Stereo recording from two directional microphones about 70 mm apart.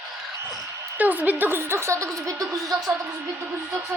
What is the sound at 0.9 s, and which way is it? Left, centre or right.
A woman's voice, right.